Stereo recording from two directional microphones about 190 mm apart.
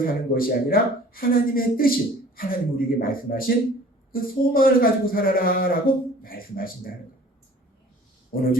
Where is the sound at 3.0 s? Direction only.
50° left (ahead or behind).